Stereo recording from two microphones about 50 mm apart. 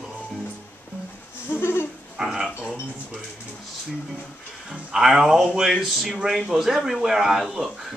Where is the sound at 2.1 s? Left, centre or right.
Centre.